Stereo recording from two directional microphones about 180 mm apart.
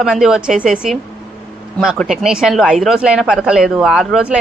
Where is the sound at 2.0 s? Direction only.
Centre (ahead or behind).